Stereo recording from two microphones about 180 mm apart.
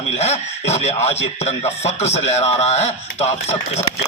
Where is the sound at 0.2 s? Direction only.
35° left (ahead or behind).